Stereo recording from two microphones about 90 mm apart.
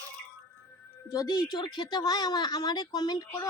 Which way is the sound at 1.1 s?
40° left (ahead or behind).